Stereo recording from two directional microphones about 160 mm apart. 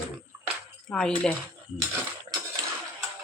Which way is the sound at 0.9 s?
5° left (ahead or behind).